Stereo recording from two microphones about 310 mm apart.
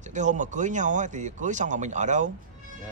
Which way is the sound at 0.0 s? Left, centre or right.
Right.